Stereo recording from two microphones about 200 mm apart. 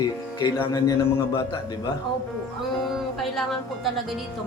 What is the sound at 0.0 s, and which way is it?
Speech, 20° left (ahead or behind).